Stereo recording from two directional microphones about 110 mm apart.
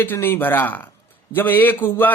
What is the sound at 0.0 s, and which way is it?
Speech, 20° left (ahead or behind).